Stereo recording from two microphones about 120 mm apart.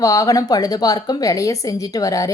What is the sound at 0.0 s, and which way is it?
Speech, 30° left (ahead or behind).